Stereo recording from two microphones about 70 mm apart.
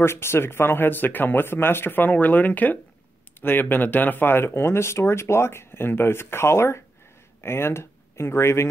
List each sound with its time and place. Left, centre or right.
0.0 s speech: left